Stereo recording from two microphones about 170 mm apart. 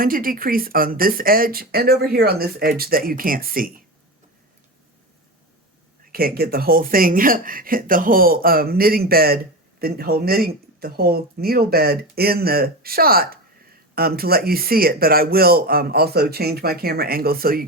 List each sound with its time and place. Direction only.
0.0 s speech: 55° right (ahead or behind)
6.1 s speech: 60° right (ahead or behind)